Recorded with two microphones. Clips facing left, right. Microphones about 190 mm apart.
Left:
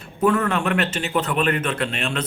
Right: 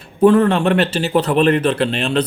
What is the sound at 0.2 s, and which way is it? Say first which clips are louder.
A man's voice: right 8 dB; 30° right (ahead or behind).